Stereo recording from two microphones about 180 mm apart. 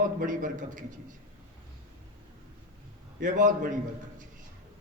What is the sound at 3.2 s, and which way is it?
Speech, 45° right (ahead or behind).